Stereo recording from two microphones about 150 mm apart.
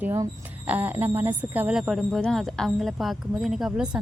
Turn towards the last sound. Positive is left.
turn(degrees=-5)  # may be behind; listen again after turning